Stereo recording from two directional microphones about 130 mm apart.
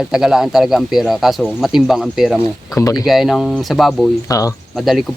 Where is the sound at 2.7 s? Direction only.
25° left (ahead or behind).